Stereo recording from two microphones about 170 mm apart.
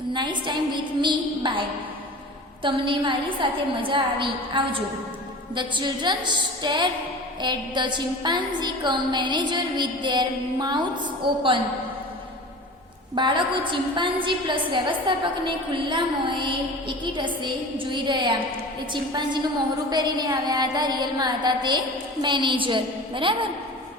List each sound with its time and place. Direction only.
0.1 s a woman's voice: 25° right (ahead or behind)
2.6 s a woman's voice: 30° right (ahead or behind)
13.1 s a woman's voice: 30° right (ahead or behind)
19.9 s a woman's voice: 25° right (ahead or behind)